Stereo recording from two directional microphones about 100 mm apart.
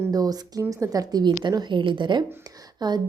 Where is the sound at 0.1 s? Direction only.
40° right (ahead or behind).